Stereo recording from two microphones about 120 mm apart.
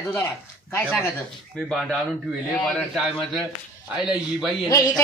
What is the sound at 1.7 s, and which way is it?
A man's voice, centre (ahead or behind).